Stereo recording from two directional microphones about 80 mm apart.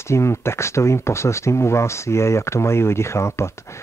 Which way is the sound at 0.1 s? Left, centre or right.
Left.